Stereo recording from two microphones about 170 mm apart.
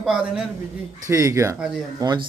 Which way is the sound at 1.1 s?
20° right (ahead or behind).